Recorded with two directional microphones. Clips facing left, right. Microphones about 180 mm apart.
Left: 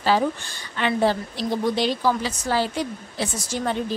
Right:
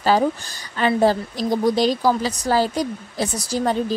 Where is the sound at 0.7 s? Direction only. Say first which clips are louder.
Right 4 dB; 40° right (ahead or behind).